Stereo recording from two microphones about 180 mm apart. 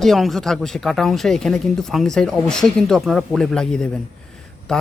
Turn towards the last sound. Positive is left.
turn(degrees=5)  # may be behind; listen again after turning